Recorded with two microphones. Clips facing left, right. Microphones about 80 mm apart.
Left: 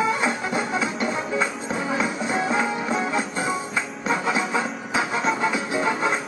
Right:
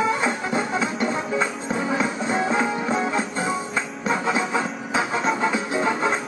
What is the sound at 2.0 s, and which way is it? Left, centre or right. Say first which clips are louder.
Music: right 1 dB; right.